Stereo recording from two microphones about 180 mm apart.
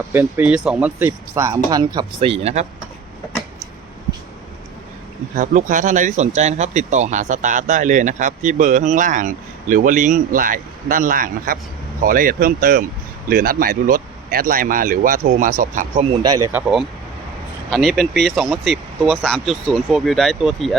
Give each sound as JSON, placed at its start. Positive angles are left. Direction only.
{"t": 0.1, "sound": "speech", "side_deg": -10}
{"t": 5.4, "sound": "speech", "side_deg": -45}
{"t": 16.5, "sound": "speech", "side_deg": -5}